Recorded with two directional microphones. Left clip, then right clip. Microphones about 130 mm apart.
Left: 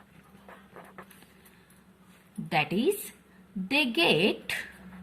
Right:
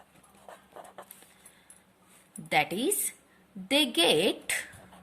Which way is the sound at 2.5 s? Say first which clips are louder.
Even; 40° right (ahead or behind).